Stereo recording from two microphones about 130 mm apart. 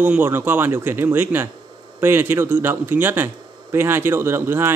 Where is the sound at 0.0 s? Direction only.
15° right (ahead or behind).